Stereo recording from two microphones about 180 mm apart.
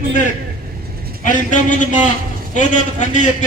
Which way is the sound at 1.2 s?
45° left (ahead or behind).